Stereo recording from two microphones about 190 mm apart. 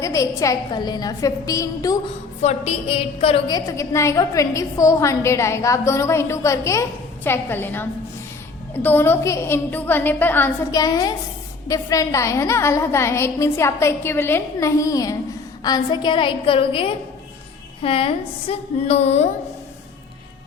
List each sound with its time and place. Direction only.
0.0 s a woman's voice: 15° left (ahead or behind)
2.4 s a woman's voice: 35° left (ahead or behind)